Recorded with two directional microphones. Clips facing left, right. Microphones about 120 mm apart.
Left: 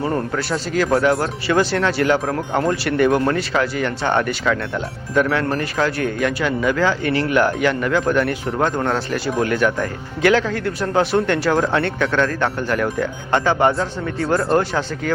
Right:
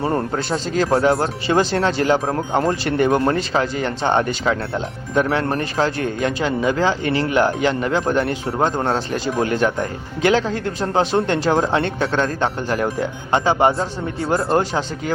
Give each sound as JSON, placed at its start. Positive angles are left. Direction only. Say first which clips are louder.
{"t": 0.0, "sound": "speech", "louder": "right 1 dB", "side_deg": -25}